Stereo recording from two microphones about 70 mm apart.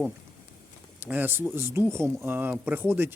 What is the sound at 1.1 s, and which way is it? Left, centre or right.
Speech, right.